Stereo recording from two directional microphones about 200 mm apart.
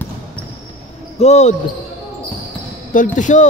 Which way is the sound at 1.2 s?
35° left (ahead or behind).